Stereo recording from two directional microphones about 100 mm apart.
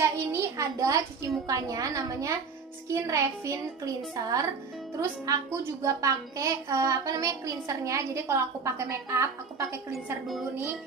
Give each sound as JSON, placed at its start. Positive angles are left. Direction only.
{"t": 0.0, "sound": "a sound", "side_deg": -30}
{"t": 1.5, "sound": "a woman's voice", "side_deg": -35}
{"t": 10.5, "sound": "music", "side_deg": -25}